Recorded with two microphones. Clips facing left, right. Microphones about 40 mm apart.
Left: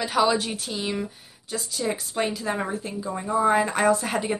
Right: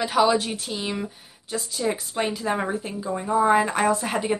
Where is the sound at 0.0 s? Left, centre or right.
Centre.